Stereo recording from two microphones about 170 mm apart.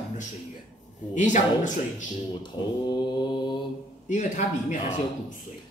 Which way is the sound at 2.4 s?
25° left (ahead or behind).